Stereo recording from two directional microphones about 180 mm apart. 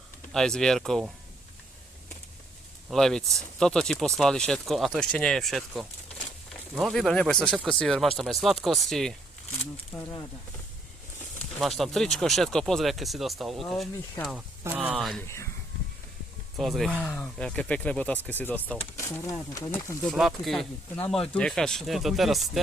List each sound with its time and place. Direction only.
0.3 s speech: 5° left (ahead or behind)
2.9 s speech: 5° left (ahead or behind)
9.9 s speech: 15° left (ahead or behind)
11.8 s speech: centre (ahead or behind)
16.6 s speech: centre (ahead or behind)
20.1 s speech: centre (ahead or behind)